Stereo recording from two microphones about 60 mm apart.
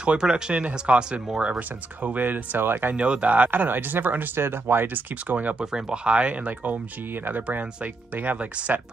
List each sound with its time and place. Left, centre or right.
0.0 s speech: centre
2.0 s speech: right
2.9 s speech: right
5.7 s speech: centre